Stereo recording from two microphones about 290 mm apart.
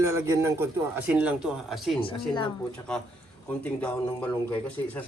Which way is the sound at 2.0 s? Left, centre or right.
Centre.